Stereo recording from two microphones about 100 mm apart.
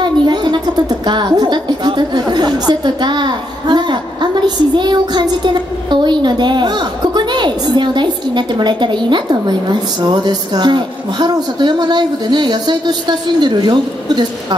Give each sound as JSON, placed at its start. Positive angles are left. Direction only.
{"t": 0.0, "sound": "a woman's voice", "side_deg": -50}